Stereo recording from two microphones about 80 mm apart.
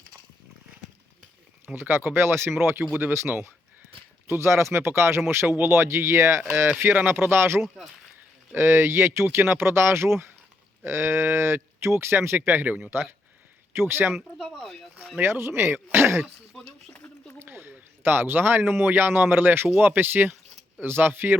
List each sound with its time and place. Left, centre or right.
1.6 s speech: right
15.2 s speech: right
16.5 s a sound: centre
17.4 s speech: right